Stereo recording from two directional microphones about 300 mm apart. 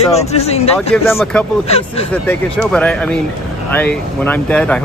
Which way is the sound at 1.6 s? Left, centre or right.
Centre.